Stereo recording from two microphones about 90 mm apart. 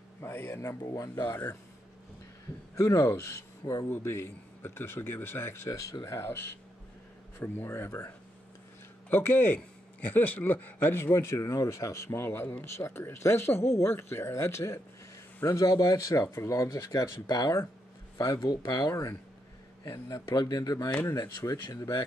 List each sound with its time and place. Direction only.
0.2 s speech: 25° left (ahead or behind)
0.8 s speech: 40° left (ahead or behind)
2.7 s speech: 35° left (ahead or behind)
9.1 s speech: 25° left (ahead or behind)